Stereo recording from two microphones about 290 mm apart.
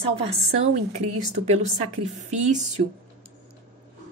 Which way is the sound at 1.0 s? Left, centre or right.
Right.